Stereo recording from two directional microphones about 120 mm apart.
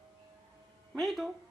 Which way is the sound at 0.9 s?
Centre (ahead or behind).